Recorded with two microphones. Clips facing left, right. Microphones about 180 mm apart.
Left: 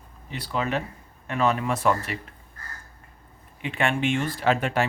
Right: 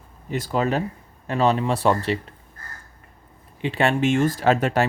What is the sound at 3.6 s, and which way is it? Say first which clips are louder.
Speech: right 5 dB; 35° right (ahead or behind).